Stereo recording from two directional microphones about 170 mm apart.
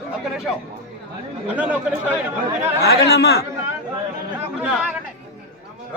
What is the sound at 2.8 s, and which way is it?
Speech, 75° left (ahead or behind).